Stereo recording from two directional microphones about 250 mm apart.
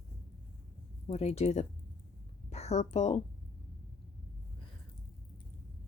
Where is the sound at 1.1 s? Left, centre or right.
Left.